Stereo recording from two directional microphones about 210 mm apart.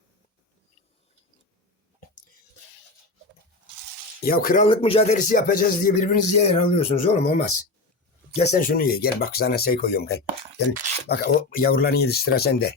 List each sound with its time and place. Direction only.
4.2 s speech: 45° left (ahead or behind)
4.7 s speech: 25° left (ahead or behind)
8.4 s speech: 45° left (ahead or behind)